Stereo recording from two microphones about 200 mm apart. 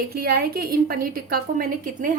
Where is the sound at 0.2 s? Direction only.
50° right (ahead or behind).